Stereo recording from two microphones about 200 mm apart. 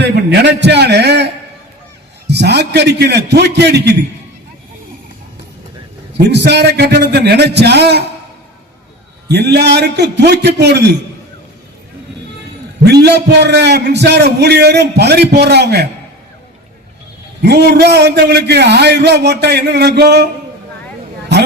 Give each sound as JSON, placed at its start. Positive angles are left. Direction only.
{"t": 0.0, "sound": "a man's voice", "side_deg": -60}
{"t": 6.1, "sound": "a man's voice", "side_deg": -55}
{"t": 9.3, "sound": "a man's voice", "side_deg": -55}
{"t": 12.8, "sound": "a man's voice", "side_deg": -55}
{"t": 17.4, "sound": "a man's voice", "side_deg": -50}